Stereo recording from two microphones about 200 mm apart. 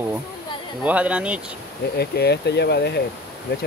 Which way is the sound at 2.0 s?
55° left (ahead or behind).